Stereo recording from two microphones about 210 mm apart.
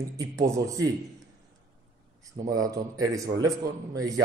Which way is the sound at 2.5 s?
15° right (ahead or behind).